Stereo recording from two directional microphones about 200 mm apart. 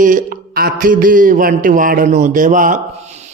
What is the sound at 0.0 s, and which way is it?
Speech, 40° right (ahead or behind).